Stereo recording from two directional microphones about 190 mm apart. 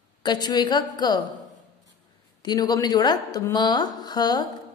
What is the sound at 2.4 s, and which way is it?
A woman's voice, 20° left (ahead or behind).